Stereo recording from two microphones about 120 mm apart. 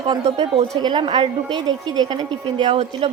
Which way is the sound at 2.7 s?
55° right (ahead or behind).